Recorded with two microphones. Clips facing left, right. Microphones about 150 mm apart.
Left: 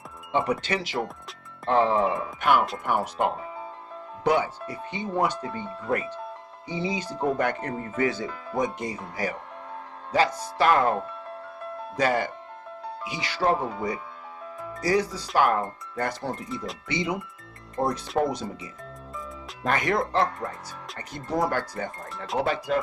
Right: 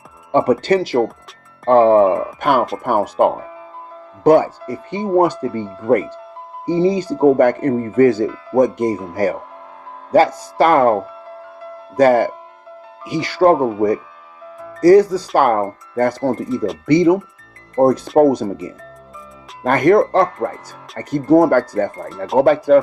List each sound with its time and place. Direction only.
0.3 s speech: 45° right (ahead or behind)
11.9 s speech: 45° right (ahead or behind)
14.8 s speech: 45° right (ahead or behind)